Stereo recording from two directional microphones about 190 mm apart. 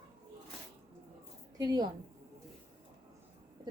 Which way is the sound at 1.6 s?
20° right (ahead or behind).